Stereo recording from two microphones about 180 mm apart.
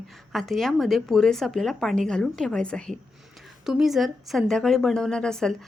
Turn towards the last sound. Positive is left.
turn(degrees=5)  # may be behind; listen again after turning